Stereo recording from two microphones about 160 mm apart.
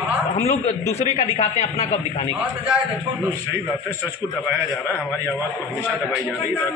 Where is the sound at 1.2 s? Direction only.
45° left (ahead or behind).